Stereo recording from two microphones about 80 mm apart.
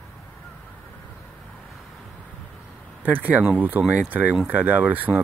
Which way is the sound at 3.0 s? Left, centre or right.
Right.